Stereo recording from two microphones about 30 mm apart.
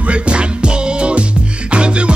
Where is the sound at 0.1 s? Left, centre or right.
Right.